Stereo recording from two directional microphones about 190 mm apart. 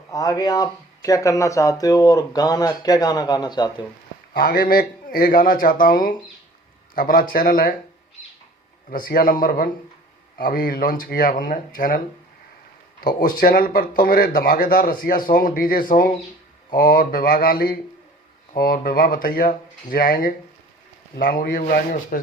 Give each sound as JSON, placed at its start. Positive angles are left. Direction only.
{"t": 0.1, "sound": "speech", "side_deg": 20}
{"t": 4.4, "sound": "speech", "side_deg": 50}
{"t": 8.9, "sound": "speech", "side_deg": 50}